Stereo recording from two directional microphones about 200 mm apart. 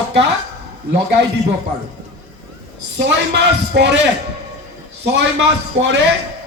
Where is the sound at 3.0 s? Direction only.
60° right (ahead or behind).